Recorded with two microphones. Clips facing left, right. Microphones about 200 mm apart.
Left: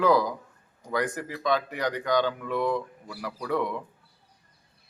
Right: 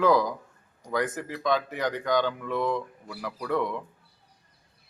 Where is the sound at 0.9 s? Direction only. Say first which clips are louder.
Even; centre (ahead or behind).